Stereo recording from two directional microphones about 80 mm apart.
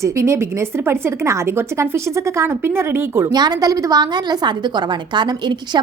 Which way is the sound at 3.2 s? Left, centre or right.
Right.